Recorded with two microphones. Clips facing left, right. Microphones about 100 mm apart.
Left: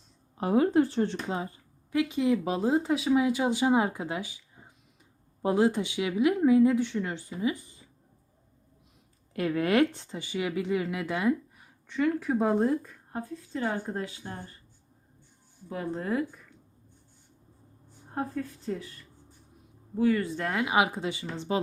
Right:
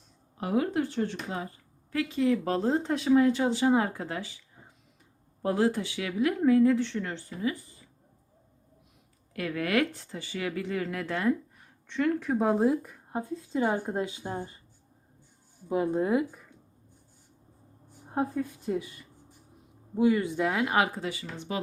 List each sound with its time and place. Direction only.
0.3 s speech: 30° left (ahead or behind)
9.3 s speech: 25° left (ahead or behind); by 14.5 s 15° right (ahead or behind)
15.7 s speech: 15° right (ahead or behind)
18.1 s speech: 10° right (ahead or behind)
20.4 s speech: centre (ahead or behind)
20.7 s speech: 15° left (ahead or behind)